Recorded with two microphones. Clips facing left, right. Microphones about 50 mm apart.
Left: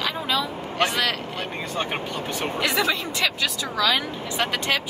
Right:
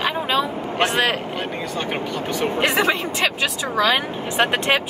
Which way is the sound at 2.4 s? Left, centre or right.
Right.